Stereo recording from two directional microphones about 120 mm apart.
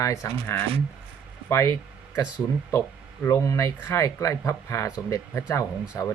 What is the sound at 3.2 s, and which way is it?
Speech, 25° left (ahead or behind).